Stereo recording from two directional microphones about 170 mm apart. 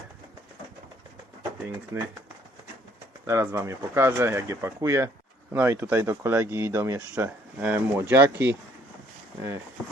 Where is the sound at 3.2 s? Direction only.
15° right (ahead or behind).